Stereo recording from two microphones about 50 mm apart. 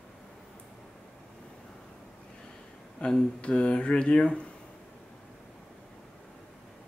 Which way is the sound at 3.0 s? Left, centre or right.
Centre.